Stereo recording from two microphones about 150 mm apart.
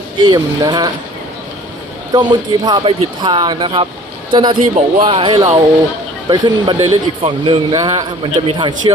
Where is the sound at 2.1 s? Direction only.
30° right (ahead or behind).